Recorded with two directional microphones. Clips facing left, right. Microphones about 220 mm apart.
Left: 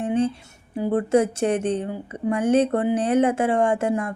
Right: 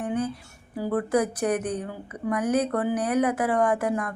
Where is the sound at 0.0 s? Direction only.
25° left (ahead or behind).